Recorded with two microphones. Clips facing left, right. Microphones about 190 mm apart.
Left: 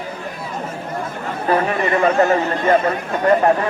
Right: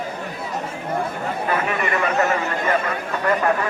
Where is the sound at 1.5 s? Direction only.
35° left (ahead or behind).